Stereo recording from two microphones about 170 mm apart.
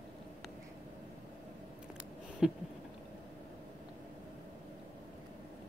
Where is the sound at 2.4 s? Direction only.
5° right (ahead or behind).